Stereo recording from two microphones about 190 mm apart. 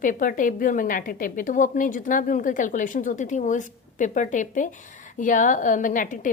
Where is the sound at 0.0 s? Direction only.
45° left (ahead or behind).